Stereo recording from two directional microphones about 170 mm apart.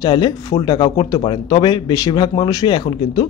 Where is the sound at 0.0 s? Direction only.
25° left (ahead or behind).